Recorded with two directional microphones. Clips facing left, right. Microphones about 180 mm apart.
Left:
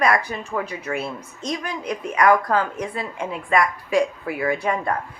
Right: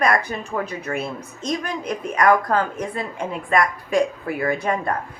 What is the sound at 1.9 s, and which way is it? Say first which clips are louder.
A woman's voice: even; 45° right (ahead or behind).